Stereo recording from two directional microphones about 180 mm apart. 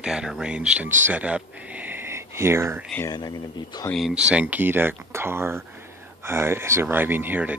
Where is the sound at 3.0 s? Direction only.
20° left (ahead or behind).